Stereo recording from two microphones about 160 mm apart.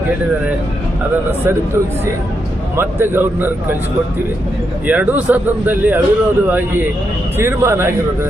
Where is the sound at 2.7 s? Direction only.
15° right (ahead or behind).